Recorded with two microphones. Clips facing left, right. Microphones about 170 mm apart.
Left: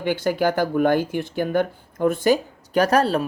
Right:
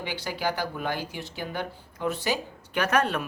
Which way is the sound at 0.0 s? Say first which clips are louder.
Left 10 dB; 50° left (ahead or behind).